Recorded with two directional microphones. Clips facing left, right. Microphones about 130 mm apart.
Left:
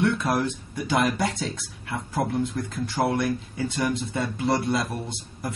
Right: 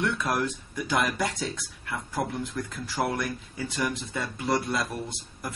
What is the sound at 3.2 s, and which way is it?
Speech, 30° left (ahead or behind).